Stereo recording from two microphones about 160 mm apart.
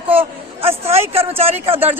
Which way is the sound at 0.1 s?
35° right (ahead or behind).